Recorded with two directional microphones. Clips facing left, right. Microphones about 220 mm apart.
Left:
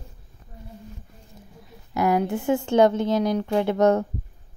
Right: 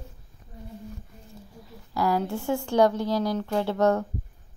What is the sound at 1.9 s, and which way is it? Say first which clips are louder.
Speech: left 4 dB; 20° left (ahead or behind).